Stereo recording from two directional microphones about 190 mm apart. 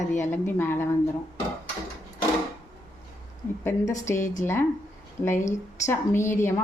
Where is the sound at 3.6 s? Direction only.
15° left (ahead or behind).